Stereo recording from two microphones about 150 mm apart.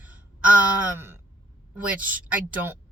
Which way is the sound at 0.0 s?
10° right (ahead or behind).